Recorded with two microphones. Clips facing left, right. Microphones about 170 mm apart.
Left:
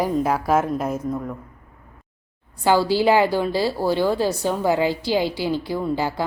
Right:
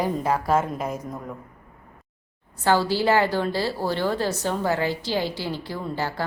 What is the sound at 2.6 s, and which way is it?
A woman's voice, 10° left (ahead or behind).